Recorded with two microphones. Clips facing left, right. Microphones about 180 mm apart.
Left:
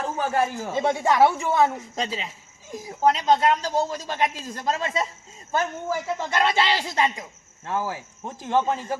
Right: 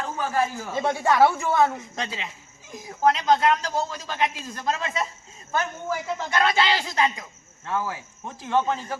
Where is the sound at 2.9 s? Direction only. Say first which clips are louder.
Even; 30° left (ahead or behind).